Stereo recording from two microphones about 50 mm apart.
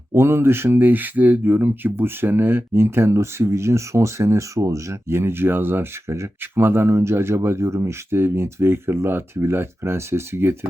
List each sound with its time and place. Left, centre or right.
0.1 s speech: right
0.8 s speech: right
6.9 s speech: right